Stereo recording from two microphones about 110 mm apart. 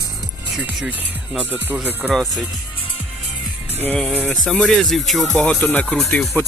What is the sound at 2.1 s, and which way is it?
Speech, 5° left (ahead or behind).